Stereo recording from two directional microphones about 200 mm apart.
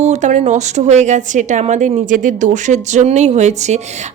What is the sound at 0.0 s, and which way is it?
Speech, 35° right (ahead or behind).